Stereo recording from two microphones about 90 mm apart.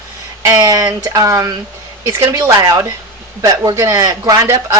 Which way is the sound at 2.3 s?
45° right (ahead or behind).